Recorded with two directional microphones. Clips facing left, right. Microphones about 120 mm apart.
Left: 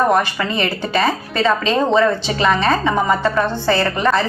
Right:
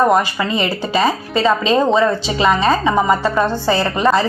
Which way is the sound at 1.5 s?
5° right (ahead or behind).